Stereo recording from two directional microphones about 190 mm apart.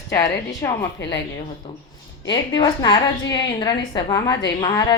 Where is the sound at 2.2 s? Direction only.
25° left (ahead or behind).